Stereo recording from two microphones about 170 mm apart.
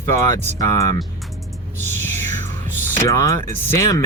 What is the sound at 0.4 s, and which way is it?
Speech, 20° left (ahead or behind).